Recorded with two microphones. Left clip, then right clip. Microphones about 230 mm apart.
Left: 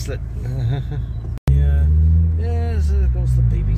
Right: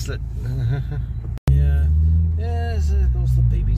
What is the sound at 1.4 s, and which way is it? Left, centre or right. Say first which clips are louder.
Vehicle: left 1 dB; centre.